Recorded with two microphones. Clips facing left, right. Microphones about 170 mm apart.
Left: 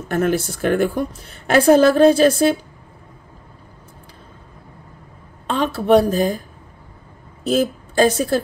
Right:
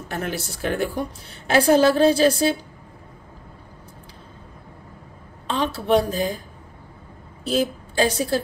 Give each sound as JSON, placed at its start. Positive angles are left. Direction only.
{"t": 0.1, "sound": "a woman's voice", "side_deg": 50}
{"t": 5.5, "sound": "a woman's voice", "side_deg": 50}
{"t": 7.4, "sound": "a woman's voice", "side_deg": 50}